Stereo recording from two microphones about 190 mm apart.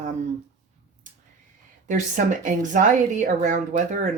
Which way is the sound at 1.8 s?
40° right (ahead or behind).